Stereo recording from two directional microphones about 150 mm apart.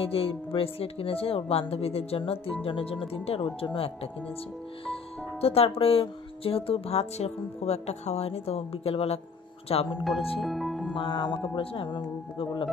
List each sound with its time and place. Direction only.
0.0 s speech: 40° left (ahead or behind)
5.4 s speech: 40° left (ahead or behind)
10.4 s music: centre (ahead or behind)
11.0 s speech: 30° left (ahead or behind)